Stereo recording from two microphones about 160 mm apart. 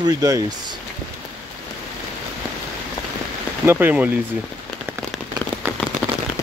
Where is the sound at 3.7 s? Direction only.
10° right (ahead or behind).